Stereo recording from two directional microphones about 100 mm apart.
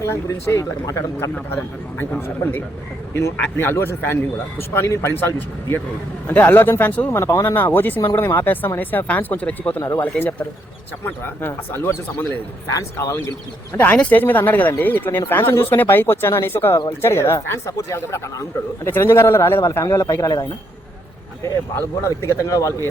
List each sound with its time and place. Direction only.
0.0 s speech: 30° left (ahead or behind)
13.7 s speech: 15° left (ahead or behind)
21.4 s speech: 25° left (ahead or behind)